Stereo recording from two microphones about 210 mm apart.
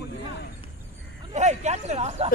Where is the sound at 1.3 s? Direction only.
35° right (ahead or behind).